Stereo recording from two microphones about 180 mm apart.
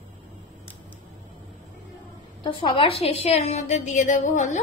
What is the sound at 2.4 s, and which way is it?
Speech, 30° left (ahead or behind).